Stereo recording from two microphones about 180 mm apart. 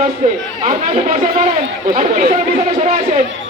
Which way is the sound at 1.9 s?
40° right (ahead or behind).